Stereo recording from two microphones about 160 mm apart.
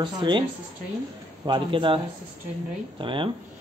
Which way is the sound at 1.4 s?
30° right (ahead or behind).